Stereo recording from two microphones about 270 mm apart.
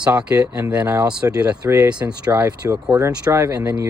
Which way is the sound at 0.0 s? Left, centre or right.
Centre.